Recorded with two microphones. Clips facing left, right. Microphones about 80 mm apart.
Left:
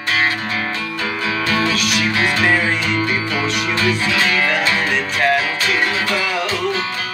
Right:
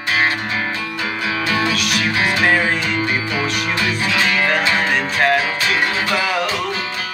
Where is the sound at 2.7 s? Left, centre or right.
Centre.